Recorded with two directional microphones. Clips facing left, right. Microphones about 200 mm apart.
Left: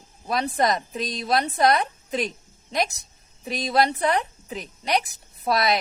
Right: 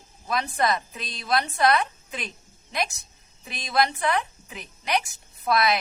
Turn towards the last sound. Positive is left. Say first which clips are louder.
# left 1 dB
turn(degrees=35)  # may be behind; listen again after turning